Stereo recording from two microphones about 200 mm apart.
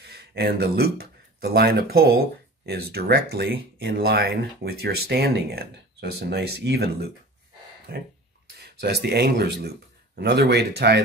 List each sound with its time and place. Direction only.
0.0 s speech: 55° right (ahead or behind)
8.5 s speech: 55° right (ahead or behind)